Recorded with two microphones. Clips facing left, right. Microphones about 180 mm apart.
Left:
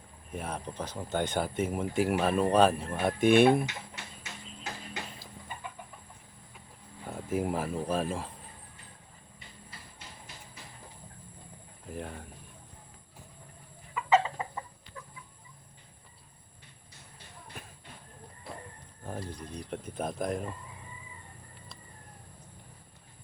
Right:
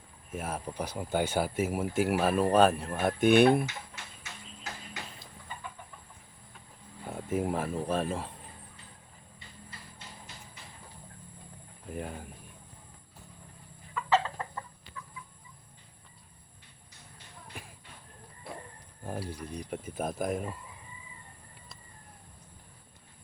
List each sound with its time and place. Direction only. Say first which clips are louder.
0.3 s speech: right 1 dB; 5° right (ahead or behind)
7.0 s a sound: right 1 dB; 5° right (ahead or behind)
7.3 s speech: even; centre (ahead or behind)
11.9 s speech: right 1 dB; centre (ahead or behind)
13.9 s chicken: left 2 dB; 10° left (ahead or behind)
15.0 s chicken: even; 35° left (ahead or behind)
17.5 s a sound: even; 10° right (ahead or behind)
19.0 s speech: right 2 dB; 10° right (ahead or behind)